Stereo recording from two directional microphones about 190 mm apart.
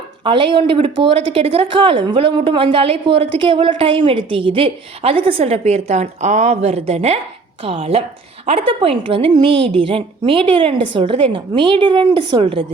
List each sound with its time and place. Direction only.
0.3 s a woman's voice: 25° right (ahead or behind)